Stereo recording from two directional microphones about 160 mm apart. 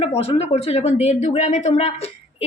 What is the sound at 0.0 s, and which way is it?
A woman's voice, 35° left (ahead or behind).